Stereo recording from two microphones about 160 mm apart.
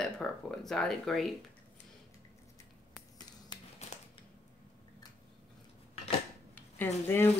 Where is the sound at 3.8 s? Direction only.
40° left (ahead or behind).